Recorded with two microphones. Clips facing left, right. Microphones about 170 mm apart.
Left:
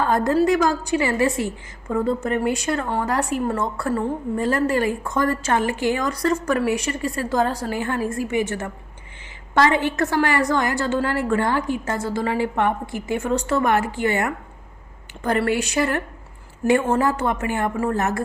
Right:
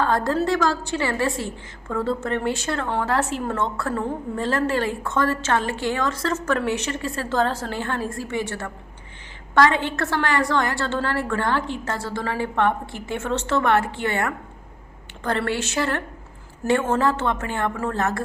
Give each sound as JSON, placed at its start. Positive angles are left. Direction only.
{"t": 0.0, "sound": "a woman's voice", "side_deg": 20}
{"t": 9.9, "sound": "a woman's voice", "side_deg": 15}